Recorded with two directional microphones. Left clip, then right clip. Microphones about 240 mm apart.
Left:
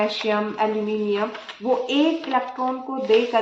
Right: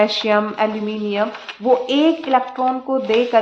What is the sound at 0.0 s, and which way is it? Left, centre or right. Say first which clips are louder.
Speech: right 6 dB; right.